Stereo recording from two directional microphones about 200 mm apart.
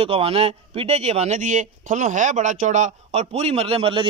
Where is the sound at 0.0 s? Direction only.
30° right (ahead or behind).